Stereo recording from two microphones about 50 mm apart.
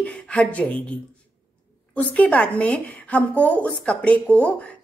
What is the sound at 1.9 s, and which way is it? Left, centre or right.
A woman's voice, left.